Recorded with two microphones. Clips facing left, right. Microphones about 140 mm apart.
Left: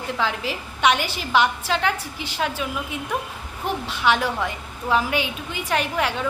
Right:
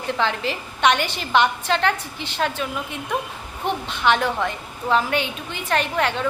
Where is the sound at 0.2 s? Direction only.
5° left (ahead or behind).